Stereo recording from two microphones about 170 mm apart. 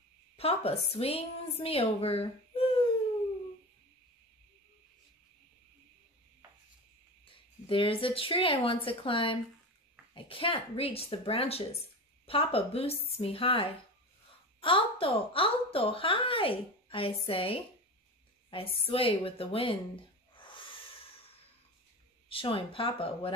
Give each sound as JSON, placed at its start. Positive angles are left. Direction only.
{"t": 0.4, "sound": "a woman's voice", "side_deg": 35}
{"t": 7.6, "sound": "a woman's voice", "side_deg": 30}
{"t": 20.3, "sound": "a sound", "side_deg": 30}
{"t": 22.3, "sound": "a woman's voice", "side_deg": 30}